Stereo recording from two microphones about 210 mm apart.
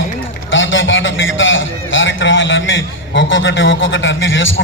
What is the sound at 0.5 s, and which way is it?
A man's voice, 65° left (ahead or behind).